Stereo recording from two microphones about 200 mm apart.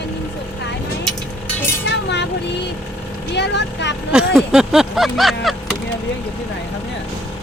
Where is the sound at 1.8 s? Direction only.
60° left (ahead or behind).